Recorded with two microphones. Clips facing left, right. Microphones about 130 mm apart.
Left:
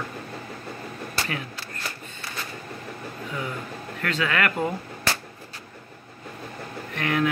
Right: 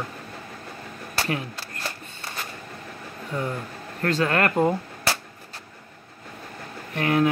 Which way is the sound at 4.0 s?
35° right (ahead or behind).